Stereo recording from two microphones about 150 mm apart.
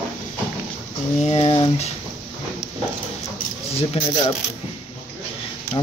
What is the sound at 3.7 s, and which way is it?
Speech, 40° left (ahead or behind).